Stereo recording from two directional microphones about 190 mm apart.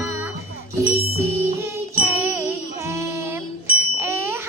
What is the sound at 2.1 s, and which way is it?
Jingle bell, 10° right (ahead or behind).